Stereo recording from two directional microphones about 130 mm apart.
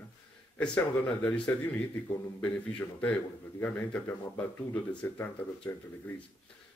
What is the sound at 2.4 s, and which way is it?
A man's voice, 10° left (ahead or behind).